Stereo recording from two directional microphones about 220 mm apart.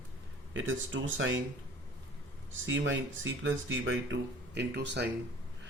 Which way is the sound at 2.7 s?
60° right (ahead or behind).